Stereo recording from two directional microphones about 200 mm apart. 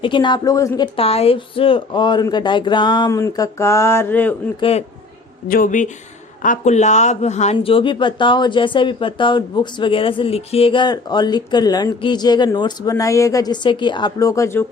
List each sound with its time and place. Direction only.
0.0 s speech: 25° left (ahead or behind)
0.9 s speech: 30° left (ahead or behind); by 4.4 s 10° left (ahead or behind)
4.6 s speech: 25° left (ahead or behind)
5.5 s speech: 45° left (ahead or behind); by 14.6 s 15° left (ahead or behind)